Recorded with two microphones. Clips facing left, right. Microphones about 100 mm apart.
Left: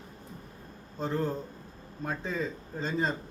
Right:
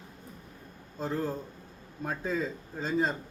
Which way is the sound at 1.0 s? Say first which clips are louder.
Left 1 dB; 5° right (ahead or behind).